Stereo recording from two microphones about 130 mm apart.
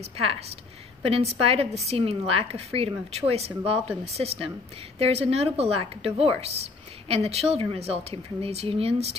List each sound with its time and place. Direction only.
0.0 s a woman's voice: 50° right (ahead or behind)